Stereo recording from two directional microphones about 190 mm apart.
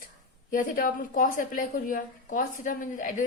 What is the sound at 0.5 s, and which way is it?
A woman's voice, 45° left (ahead or behind).